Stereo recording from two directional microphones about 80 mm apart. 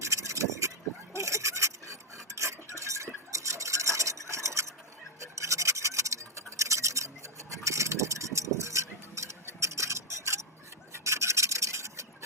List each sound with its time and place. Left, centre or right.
0.0 s vehicle: right
1.1 s a sound: right
5.2 s scratch: right
10.9 s rub: right